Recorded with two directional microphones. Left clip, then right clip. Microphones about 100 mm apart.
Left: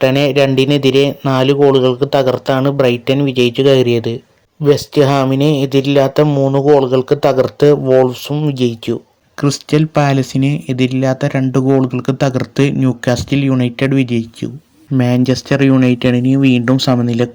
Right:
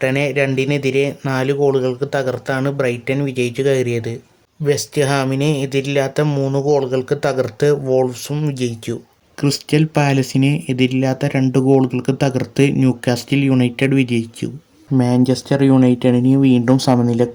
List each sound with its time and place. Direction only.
0.0 s speech: 35° left (ahead or behind)
6.2 s speech: 10° left (ahead or behind)
6.6 s speech: 30° left (ahead or behind)
14.9 s speech: 40° left (ahead or behind)